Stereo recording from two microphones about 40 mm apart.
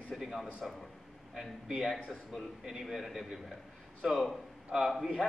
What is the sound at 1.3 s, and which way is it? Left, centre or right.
A man's voice, centre.